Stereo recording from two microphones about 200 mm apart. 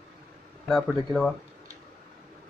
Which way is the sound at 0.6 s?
5° left (ahead or behind).